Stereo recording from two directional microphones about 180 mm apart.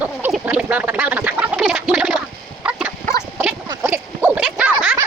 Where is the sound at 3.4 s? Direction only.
10° right (ahead or behind).